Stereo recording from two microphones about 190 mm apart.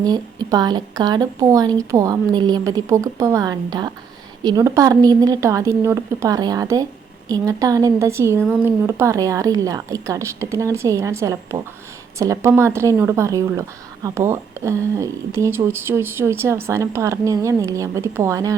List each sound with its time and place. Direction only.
0.0 s a woman's voice: 20° right (ahead or behind)